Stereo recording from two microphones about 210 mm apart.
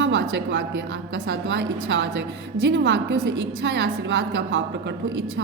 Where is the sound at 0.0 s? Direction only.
60° right (ahead or behind).